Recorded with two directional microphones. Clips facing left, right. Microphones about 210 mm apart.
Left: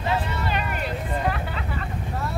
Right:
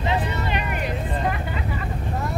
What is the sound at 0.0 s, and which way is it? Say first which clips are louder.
Vehicle: right 1 dB; 20° right (ahead or behind).